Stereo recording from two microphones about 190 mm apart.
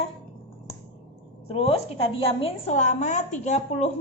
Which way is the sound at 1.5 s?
30° left (ahead or behind).